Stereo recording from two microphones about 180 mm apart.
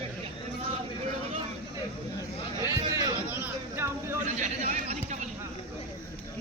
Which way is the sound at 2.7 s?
20° right (ahead or behind).